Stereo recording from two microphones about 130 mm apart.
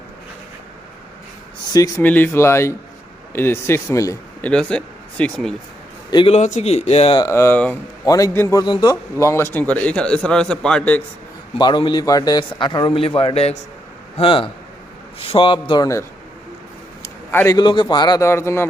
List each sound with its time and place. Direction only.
2.0 s speech: 15° left (ahead or behind)
4.4 s speech: 10° left (ahead or behind)
6.1 s a man's voice: 35° left (ahead or behind)
6.3 s speech: 60° left (ahead or behind)
7.2 s a man's voice: 20° left (ahead or behind)
11.5 s a man's voice: 35° left (ahead or behind)
17.3 s speech: 20° left (ahead or behind)
17.6 s a man's voice: 35° left (ahead or behind); by 18.7 s 20° left (ahead or behind)